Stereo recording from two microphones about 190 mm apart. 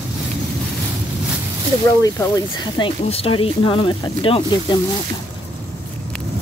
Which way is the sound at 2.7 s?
30° left (ahead or behind).